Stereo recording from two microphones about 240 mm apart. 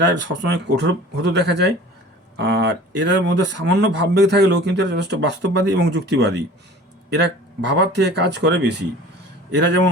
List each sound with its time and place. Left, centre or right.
0.0 s speech: right